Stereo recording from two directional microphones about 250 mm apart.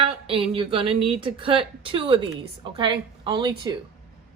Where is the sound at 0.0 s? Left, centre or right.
Right.